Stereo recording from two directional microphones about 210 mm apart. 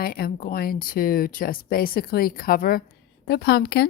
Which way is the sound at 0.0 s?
45° left (ahead or behind).